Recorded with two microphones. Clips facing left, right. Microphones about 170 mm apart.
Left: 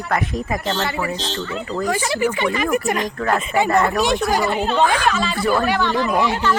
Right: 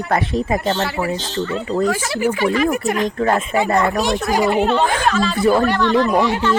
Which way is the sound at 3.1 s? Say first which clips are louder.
Right 3 dB; 25° right (ahead or behind).